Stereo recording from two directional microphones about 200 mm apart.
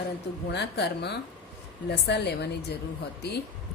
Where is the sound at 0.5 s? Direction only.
55° left (ahead or behind).